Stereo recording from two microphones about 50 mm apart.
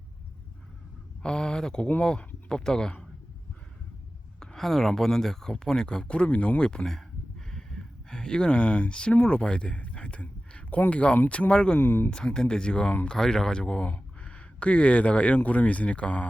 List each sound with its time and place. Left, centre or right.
1.2 s speech: centre
4.4 s speech: centre
11.8 s speech: left
12.1 s speech: centre
13.8 s speech: left